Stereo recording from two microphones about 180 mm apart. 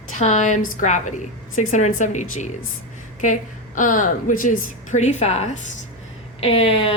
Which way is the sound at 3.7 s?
45° left (ahead or behind).